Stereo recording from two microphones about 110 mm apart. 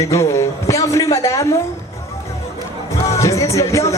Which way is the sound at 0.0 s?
25° left (ahead or behind).